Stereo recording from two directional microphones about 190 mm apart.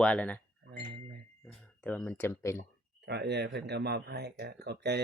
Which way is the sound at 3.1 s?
65° right (ahead or behind).